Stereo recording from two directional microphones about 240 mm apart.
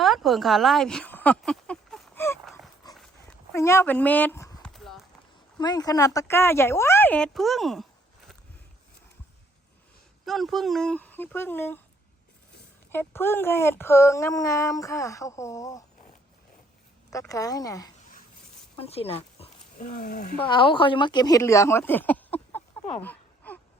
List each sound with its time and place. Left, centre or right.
0.0 s a sound: centre
2.9 s dog: centre
4.7 s clip-clop: centre
5.5 s speech: centre
10.2 s speech: centre
12.9 s speech: centre
17.1 s speech: centre
23.0 s a sound: centre